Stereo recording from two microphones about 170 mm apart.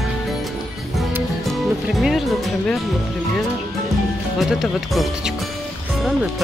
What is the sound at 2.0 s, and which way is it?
Speech, centre (ahead or behind).